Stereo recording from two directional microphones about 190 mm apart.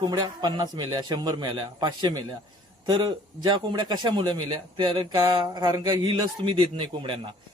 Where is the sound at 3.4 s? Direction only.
25° right (ahead or behind).